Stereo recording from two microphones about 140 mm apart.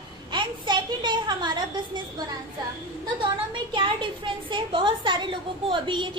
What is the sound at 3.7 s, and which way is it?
A woman's voice, 35° right (ahead or behind).